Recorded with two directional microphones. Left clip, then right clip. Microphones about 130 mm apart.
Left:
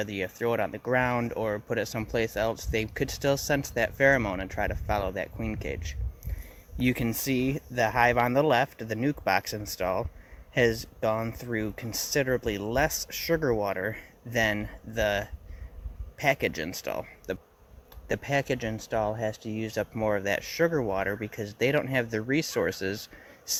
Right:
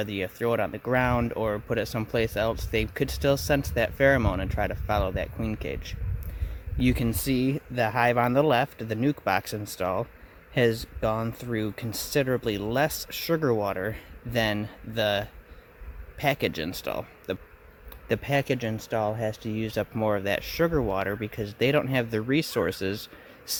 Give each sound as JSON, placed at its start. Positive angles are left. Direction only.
{"t": 0.0, "sound": "speech", "side_deg": -30}